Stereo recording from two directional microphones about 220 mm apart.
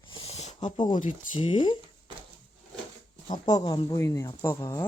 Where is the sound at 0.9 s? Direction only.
35° left (ahead or behind).